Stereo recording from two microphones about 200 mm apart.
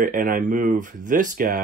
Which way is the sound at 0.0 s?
45° right (ahead or behind).